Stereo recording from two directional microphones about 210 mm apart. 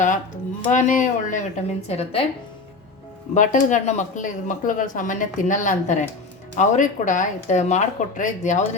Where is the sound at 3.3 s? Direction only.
35° left (ahead or behind).